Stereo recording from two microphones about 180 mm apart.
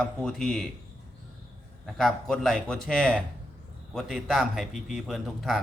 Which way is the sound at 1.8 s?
Centre (ahead or behind).